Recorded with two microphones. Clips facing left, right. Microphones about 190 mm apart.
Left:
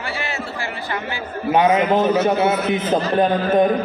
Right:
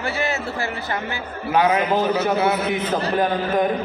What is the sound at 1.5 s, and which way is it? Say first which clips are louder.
A man's voice: left 3 dB; 20° left (ahead or behind).